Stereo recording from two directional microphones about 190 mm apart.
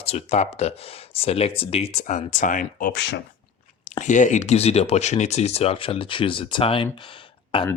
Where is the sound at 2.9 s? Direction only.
70° left (ahead or behind).